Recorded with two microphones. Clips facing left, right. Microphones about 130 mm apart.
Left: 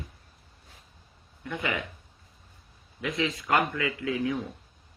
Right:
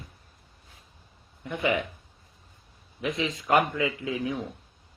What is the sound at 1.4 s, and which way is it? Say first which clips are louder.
Speech: right 5 dB; 20° right (ahead or behind).